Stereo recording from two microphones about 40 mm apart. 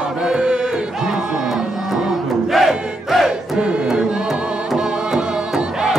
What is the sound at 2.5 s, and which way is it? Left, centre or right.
Battle cry, centre.